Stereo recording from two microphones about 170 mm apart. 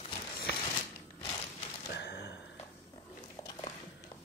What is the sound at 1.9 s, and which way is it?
Gasp, 80° left.